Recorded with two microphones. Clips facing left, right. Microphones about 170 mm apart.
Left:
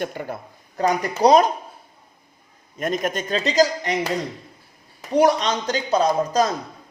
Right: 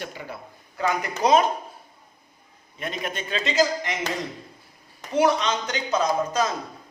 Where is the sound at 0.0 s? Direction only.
50° left (ahead or behind).